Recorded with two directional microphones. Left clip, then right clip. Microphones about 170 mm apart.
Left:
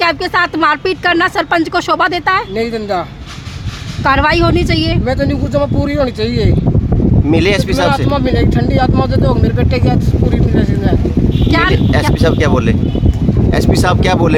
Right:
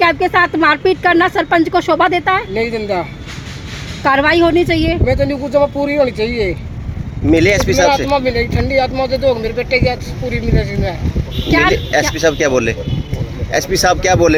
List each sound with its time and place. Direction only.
0.0 s speech: 30° left (ahead or behind)
4.0 s speech: 25° left (ahead or behind)
7.3 s speech: 10° left (ahead or behind)
11.7 s speech: 10° left (ahead or behind)